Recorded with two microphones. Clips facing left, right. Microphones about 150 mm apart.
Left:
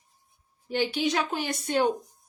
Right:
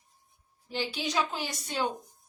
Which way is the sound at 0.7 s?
55° left (ahead or behind).